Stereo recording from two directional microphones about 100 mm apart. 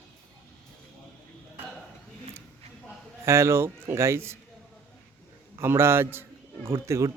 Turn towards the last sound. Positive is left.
turn(degrees=-30)  # may be behind; listen again after turning